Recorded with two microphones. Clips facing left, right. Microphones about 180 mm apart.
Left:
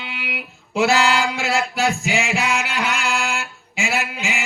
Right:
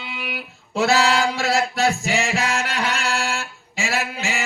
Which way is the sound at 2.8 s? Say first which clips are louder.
Left 1 dB; 35° right (ahead or behind).